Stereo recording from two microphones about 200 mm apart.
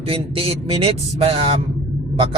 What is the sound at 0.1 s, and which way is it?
Speech, 25° right (ahead or behind).